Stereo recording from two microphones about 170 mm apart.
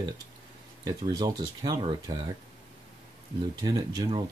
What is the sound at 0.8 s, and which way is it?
Speech, 25° right (ahead or behind).